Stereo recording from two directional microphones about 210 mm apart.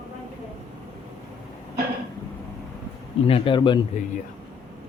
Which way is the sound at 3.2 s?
25° left (ahead or behind).